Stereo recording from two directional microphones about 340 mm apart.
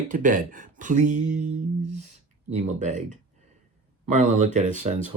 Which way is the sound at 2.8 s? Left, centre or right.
Right.